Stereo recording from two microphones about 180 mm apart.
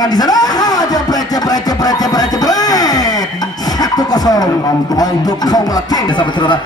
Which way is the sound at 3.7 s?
20° left (ahead or behind).